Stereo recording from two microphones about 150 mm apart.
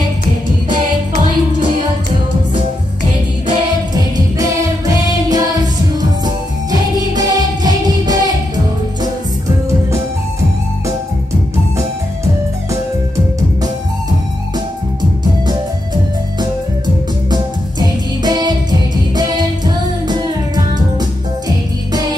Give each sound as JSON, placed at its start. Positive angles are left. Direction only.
{"t": 3.9, "sound": "music", "side_deg": -25}
{"t": 17.3, "sound": "music", "side_deg": -30}